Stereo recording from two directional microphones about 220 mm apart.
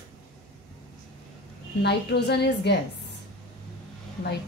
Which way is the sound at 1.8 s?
50° left (ahead or behind).